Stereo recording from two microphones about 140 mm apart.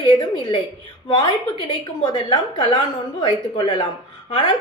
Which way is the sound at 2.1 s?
35° left (ahead or behind).